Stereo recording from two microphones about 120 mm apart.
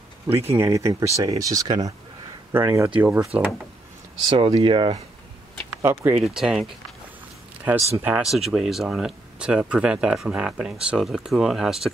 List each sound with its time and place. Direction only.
0.3 s speech: 20° right (ahead or behind)
3.3 s speech: 10° right (ahead or behind)
4.3 s speech: 40° right (ahead or behind)
5.8 s speech: 20° right (ahead or behind)
6.1 s speech: 5° right (ahead or behind)
8.0 s speech: 10° right (ahead or behind)